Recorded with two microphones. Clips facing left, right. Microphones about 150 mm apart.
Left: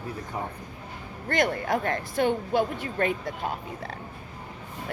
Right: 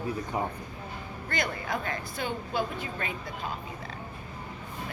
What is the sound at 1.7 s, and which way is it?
Speech, 65° left (ahead or behind).